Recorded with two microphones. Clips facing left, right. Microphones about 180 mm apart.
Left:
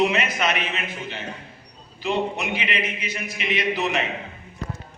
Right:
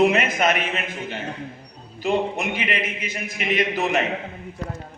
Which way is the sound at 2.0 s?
50° right (ahead or behind).